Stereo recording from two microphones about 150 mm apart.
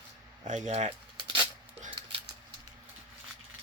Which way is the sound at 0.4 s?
50° right (ahead or behind).